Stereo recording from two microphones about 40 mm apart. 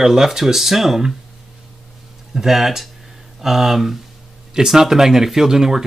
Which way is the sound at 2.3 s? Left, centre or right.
Centre.